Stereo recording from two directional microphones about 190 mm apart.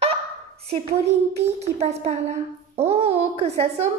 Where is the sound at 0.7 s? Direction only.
35° right (ahead or behind).